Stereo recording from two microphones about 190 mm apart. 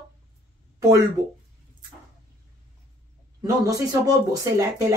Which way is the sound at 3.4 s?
20° right (ahead or behind).